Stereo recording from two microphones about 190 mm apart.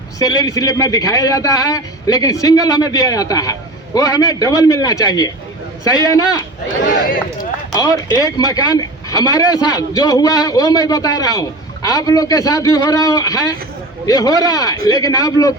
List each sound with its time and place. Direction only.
0.2 s speech: 20° left (ahead or behind)
6.8 s speech: 45° left (ahead or behind)
7.7 s speech: 20° left (ahead or behind)